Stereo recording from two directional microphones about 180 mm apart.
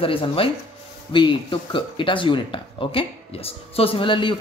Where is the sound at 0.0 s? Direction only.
30° left (ahead or behind).